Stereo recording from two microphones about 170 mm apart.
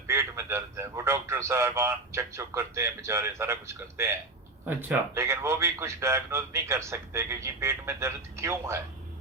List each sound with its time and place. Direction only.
0.1 s a man's voice: 15° right (ahead or behind)